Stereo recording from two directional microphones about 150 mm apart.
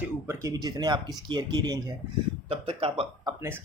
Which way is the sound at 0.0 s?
20° right (ahead or behind).